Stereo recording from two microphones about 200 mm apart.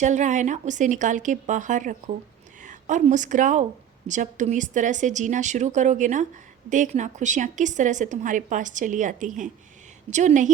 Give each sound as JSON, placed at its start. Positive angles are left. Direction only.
{"t": 0.0, "sound": "a woman's voice", "side_deg": -35}